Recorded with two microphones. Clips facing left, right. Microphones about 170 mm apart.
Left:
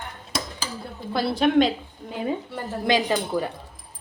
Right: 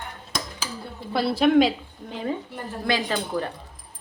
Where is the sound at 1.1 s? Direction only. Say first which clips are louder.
Right 1 dB; centre (ahead or behind).